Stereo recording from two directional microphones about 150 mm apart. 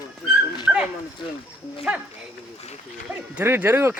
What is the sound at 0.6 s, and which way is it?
Speech, 5° right (ahead or behind).